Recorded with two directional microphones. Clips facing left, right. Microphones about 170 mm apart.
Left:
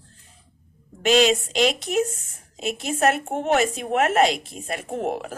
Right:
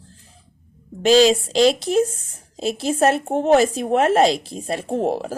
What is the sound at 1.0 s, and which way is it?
A woman's voice, 30° right (ahead or behind).